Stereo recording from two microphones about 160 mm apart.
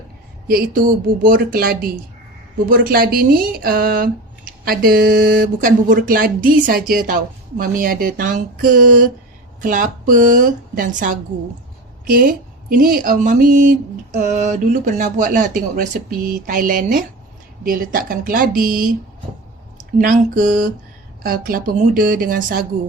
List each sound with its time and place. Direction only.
0.4 s speech: 65° right (ahead or behind)
20.0 s speech: 55° right (ahead or behind)